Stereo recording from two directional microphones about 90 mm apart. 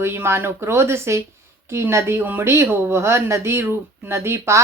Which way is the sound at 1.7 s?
30° right (ahead or behind).